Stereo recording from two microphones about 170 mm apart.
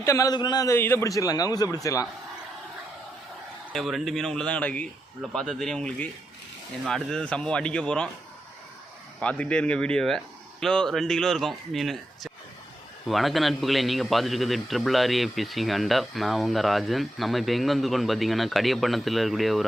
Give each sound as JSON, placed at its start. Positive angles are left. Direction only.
{"t": 0.0, "sound": "a man's voice", "side_deg": 20}
{"t": 3.7, "sound": "a man's voice", "side_deg": 0}
{"t": 9.2, "sound": "a man's voice", "side_deg": 5}